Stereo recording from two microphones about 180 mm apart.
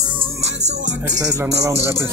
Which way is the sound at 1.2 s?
15° right (ahead or behind).